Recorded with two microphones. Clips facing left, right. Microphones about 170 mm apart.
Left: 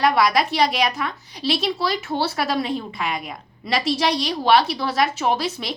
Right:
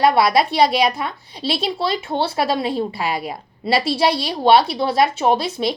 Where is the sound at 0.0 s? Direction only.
30° right (ahead or behind).